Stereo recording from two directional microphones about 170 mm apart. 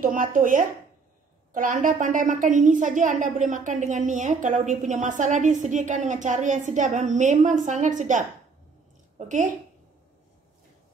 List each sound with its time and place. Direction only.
0.0 s a woman's voice: 50° right (ahead or behind)